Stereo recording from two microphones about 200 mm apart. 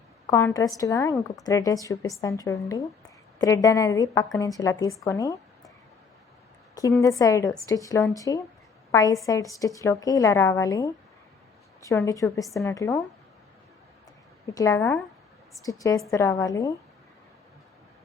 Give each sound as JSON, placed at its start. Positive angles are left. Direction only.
{"t": 0.3, "sound": "a woman's voice", "side_deg": 15}
{"t": 6.8, "sound": "a woman's voice", "side_deg": 15}
{"t": 14.4, "sound": "a woman's voice", "side_deg": 15}